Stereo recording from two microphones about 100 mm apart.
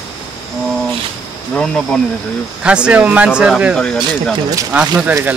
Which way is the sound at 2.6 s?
10° right (ahead or behind).